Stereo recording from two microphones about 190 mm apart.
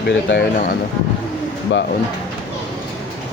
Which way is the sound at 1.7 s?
75° left (ahead or behind).